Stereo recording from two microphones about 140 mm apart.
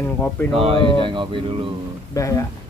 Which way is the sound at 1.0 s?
35° right (ahead or behind).